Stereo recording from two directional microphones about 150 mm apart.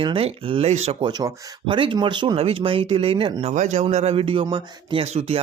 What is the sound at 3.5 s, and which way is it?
Speech, 50° right (ahead or behind).